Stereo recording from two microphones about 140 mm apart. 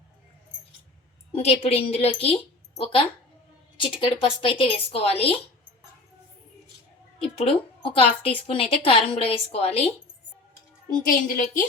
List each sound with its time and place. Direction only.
1.4 s a woman's voice: 45° left (ahead or behind)
7.2 s a woman's voice: 45° left (ahead or behind)
10.8 s a child's voice: 85° left; by 11.6 s 70° left (ahead or behind)